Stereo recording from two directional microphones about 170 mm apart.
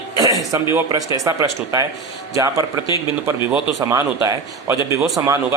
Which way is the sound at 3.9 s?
15° right (ahead or behind).